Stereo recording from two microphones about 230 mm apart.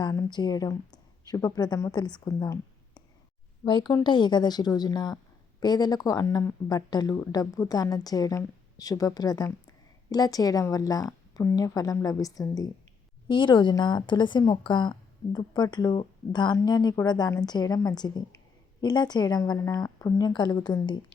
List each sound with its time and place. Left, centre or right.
0.0 s a woman's voice: centre